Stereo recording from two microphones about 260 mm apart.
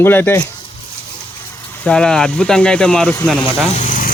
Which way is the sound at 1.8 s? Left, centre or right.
Centre.